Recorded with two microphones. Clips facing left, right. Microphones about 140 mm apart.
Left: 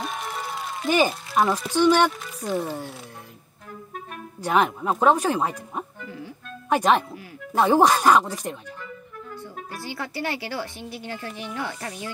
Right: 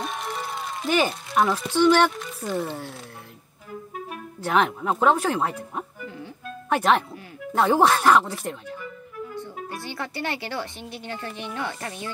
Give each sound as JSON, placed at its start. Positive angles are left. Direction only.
{"t": 0.0, "sound": "music", "side_deg": 0}
{"t": 1.8, "sound": "speech", "side_deg": 0}
{"t": 4.4, "sound": "speech", "side_deg": 15}
{"t": 6.7, "sound": "speech", "side_deg": 10}
{"t": 9.8, "sound": "speech", "side_deg": -20}